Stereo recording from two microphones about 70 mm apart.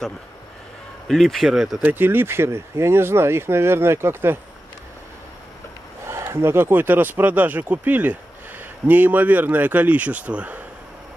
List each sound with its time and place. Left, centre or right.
1.0 s speech: centre
1.9 s speech: right
6.0 s speech: right